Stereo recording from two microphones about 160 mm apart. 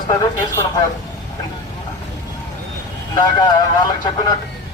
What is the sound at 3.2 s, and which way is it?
Speech, 25° left (ahead or behind).